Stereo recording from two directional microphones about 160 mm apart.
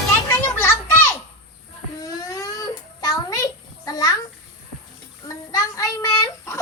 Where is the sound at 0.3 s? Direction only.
15° left (ahead or behind).